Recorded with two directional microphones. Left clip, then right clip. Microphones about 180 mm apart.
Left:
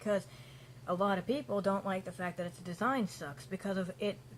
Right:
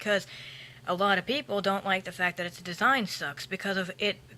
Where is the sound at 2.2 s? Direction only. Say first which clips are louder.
Right 9 dB; 10° right (ahead or behind).